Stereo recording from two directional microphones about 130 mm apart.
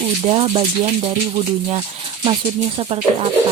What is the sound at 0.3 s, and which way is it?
Speech, 50° right (ahead or behind).